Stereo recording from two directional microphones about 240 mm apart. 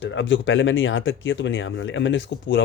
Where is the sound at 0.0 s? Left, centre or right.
Left.